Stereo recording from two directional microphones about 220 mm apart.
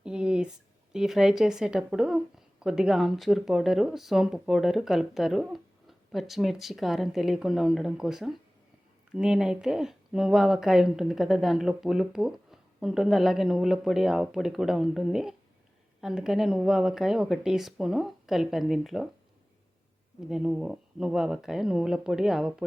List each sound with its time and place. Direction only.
0.0 s a sound: 5° right (ahead or behind)
0.9 s speech: centre (ahead or behind)
20.3 s speech: 5° right (ahead or behind)